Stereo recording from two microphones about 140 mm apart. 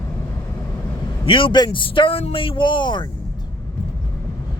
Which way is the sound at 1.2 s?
40° left (ahead or behind).